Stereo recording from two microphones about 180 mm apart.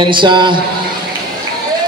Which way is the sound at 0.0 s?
25° right (ahead or behind).